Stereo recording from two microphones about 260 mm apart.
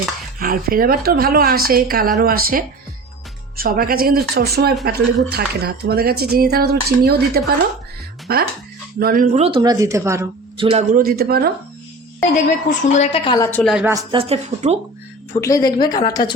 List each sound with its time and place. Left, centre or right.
0.3 s a woman's voice: right; by 10.7 s centre
10.7 s a woman's voice: right
12.6 s speech: left; by 13.9 s centre
13.9 s speech: centre
15.3 s speech: centre